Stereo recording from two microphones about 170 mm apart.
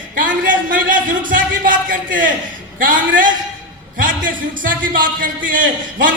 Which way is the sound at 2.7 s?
55° right (ahead or behind).